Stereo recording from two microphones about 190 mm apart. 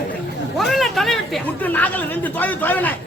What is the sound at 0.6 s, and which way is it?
A man's voice, centre (ahead or behind).